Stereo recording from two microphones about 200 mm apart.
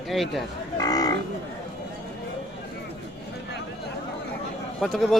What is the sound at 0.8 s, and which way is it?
Cattle, 20° left (ahead or behind).